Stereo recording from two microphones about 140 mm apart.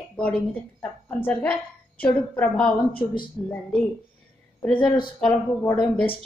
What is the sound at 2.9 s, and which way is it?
Speech, 40° left (ahead or behind).